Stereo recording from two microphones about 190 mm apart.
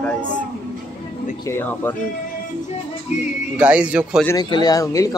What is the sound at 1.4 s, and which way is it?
Speech, 10° left (ahead or behind).